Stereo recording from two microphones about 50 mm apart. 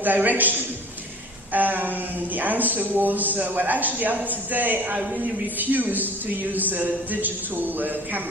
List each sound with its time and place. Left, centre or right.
0.0 s a man's voice: right